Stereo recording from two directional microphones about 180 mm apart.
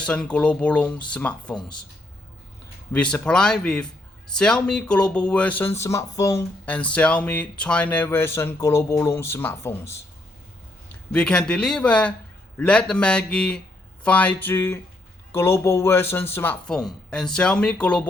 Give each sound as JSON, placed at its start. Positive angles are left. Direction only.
{"t": 0.0, "sound": "speech", "side_deg": 5}
{"t": 2.9, "sound": "speech", "side_deg": 5}
{"t": 11.1, "sound": "speech", "side_deg": 5}